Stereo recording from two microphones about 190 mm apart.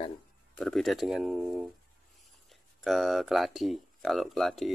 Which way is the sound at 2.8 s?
Centre (ahead or behind).